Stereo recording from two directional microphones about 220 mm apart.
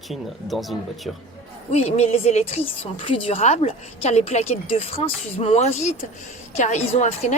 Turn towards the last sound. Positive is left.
turn(degrees=30)  # may be behind; listen again after turning